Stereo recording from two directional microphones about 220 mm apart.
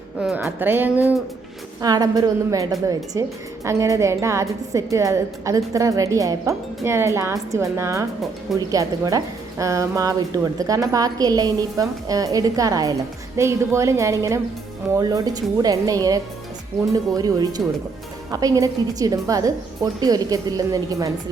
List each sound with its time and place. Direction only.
0.2 s a woman's voice: 5° right (ahead or behind)